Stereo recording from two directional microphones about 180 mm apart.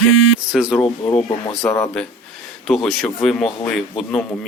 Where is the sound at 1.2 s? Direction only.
25° left (ahead or behind).